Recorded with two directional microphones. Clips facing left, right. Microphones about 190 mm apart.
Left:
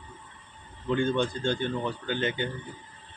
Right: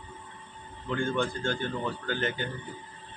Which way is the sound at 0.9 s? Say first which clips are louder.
Left 3 dB; 20° left (ahead or behind).